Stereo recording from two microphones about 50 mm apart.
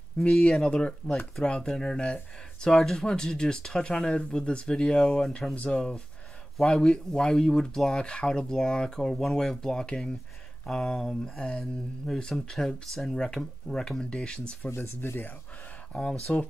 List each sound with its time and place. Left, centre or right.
0.3 s speech: centre
14.8 s speech: left
15.9 s speech: left